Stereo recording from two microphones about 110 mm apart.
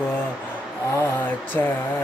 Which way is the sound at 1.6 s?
20° left (ahead or behind).